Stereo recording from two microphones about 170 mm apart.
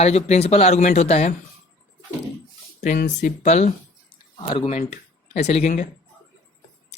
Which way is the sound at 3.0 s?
45° left (ahead or behind).